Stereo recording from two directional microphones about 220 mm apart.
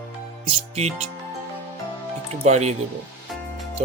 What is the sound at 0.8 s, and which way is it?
Speech, 30° right (ahead or behind).